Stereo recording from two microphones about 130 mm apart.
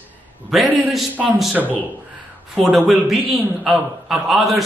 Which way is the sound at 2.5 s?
5° right (ahead or behind).